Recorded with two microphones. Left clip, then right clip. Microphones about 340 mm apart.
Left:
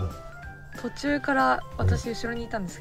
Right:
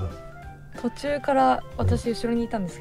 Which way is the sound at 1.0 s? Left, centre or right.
Centre.